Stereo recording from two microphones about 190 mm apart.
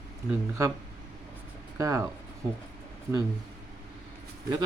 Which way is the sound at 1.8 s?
15° right (ahead or behind).